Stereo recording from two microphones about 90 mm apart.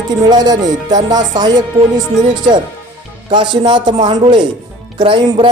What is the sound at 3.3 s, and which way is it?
Speech, 60° right (ahead or behind).